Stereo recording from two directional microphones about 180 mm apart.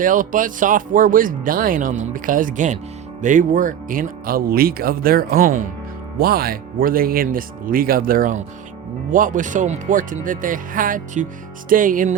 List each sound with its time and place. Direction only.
0.0 s speech: 45° right (ahead or behind)